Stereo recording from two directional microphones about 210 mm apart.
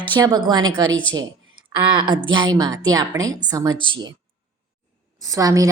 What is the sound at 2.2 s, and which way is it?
A woman's voice, 20° right (ahead or behind).